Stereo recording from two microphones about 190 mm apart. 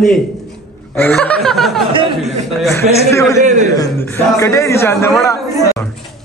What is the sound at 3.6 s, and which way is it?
Speech, 15° left (ahead or behind).